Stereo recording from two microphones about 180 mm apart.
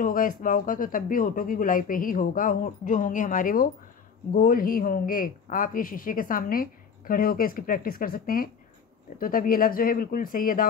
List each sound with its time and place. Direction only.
0.0 s a woman's voice: 50° left (ahead or behind)